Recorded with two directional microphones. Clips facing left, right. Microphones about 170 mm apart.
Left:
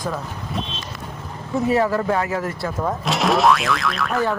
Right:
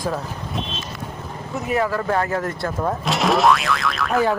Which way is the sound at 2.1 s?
10° left (ahead or behind).